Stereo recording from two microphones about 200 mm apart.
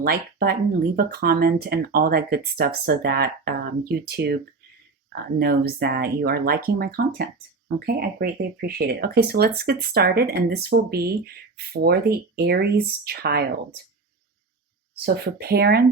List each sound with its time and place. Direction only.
0.0 s speech: 50° right (ahead or behind)
5.4 s speech: 50° right (ahead or behind)
15.0 s speech: 50° right (ahead or behind)